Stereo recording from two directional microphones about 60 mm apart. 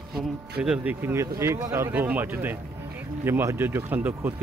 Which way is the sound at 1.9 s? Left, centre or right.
Right.